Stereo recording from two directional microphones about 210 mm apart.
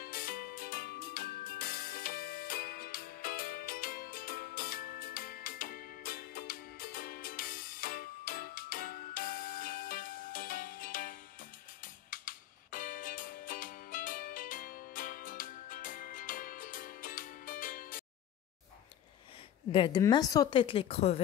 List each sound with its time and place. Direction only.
0.0 s music: 45° left (ahead or behind)
19.7 s a woman's voice: 25° left (ahead or behind)